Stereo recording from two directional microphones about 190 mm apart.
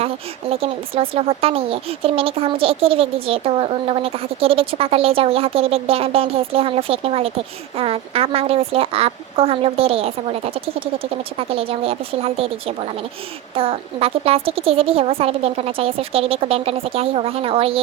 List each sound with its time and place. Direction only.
0.5 s speech: 30° right (ahead or behind)